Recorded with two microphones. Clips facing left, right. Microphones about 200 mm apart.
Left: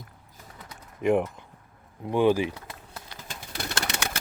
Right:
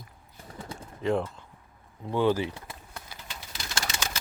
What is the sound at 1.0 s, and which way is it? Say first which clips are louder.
Speech: left 4 dB; 15° left (ahead or behind).